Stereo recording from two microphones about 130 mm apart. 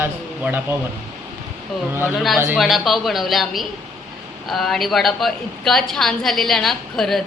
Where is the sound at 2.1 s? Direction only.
Centre (ahead or behind).